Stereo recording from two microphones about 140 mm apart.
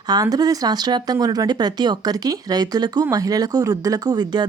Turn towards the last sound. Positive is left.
turn(degrees=-30)  # may be behind; listen again after turning